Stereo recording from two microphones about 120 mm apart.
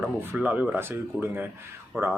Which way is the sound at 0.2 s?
15° right (ahead or behind).